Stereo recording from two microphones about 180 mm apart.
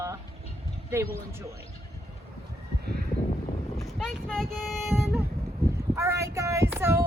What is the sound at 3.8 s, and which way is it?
Speech, centre (ahead or behind).